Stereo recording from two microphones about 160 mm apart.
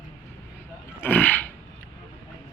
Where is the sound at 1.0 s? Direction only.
10° left (ahead or behind).